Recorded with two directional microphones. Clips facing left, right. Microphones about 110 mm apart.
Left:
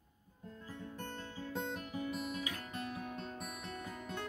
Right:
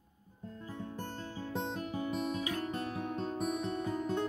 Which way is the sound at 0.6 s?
30° right (ahead or behind).